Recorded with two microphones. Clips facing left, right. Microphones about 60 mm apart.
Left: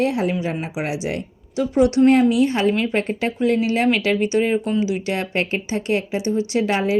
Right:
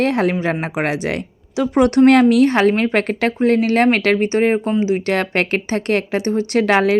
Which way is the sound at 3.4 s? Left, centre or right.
Right.